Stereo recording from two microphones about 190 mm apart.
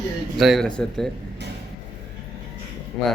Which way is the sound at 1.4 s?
60° right (ahead or behind).